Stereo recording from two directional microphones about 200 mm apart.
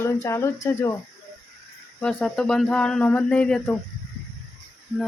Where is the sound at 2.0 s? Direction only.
5° left (ahead or behind).